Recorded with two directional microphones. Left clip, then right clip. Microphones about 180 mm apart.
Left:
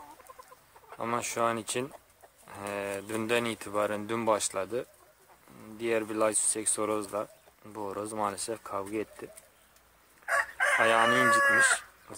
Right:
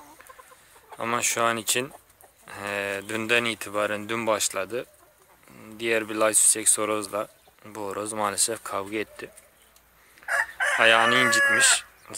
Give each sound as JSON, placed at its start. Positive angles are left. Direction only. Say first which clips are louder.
{"t": 0.9, "sound": "speech", "louder": "right 6 dB", "side_deg": 5}
{"t": 10.2, "sound": "chicken", "louder": "right 3 dB", "side_deg": 50}
{"t": 10.8, "sound": "speech", "louder": "right 6 dB", "side_deg": 5}